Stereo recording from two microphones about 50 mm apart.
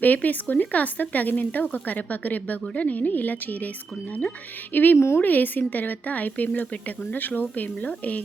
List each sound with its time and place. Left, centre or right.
0.0 s speech: left
4.7 s speech: left
4.9 s a woman's voice: left
5.2 s speech: left